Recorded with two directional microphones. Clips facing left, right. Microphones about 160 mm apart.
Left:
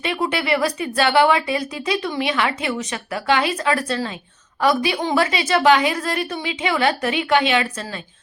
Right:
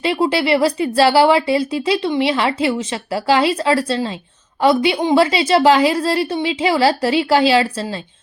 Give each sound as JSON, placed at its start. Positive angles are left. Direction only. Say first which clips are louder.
{"t": 0.0, "sound": "speech", "louder": "right 6 dB", "side_deg": -30}